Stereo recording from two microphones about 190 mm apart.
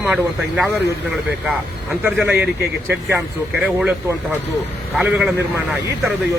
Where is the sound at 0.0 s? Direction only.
5° right (ahead or behind).